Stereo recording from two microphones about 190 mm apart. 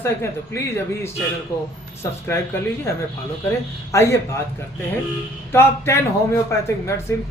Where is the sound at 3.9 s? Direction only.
15° left (ahead or behind).